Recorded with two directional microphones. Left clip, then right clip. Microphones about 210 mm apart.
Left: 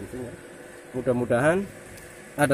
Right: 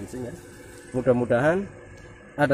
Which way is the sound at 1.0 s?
20° right (ahead or behind).